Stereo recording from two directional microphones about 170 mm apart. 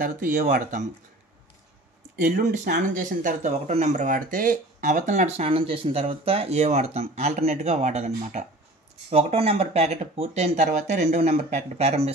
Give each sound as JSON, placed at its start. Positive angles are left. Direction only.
{"t": 0.0, "sound": "speech", "side_deg": -55}
{"t": 2.2, "sound": "speech", "side_deg": -55}